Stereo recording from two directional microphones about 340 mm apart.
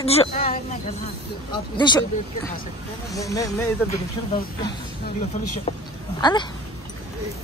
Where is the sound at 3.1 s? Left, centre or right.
Centre.